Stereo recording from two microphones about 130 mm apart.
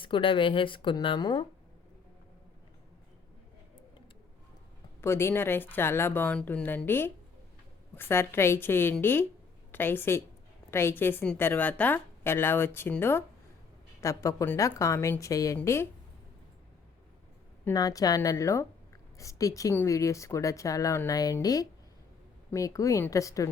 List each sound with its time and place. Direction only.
0.0 s speech: 40° left (ahead or behind)
4.9 s a woman's voice: 20° left (ahead or behind)
17.7 s speech: 30° left (ahead or behind)